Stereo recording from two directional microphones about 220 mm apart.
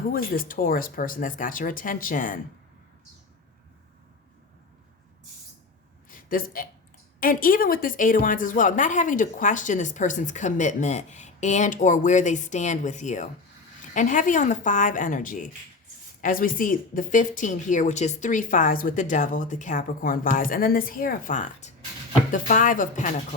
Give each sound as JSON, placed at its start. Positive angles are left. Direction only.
{"t": 0.1, "sound": "speech", "side_deg": 40}
{"t": 6.1, "sound": "a sound", "side_deg": 40}
{"t": 7.2, "sound": "speech", "side_deg": 40}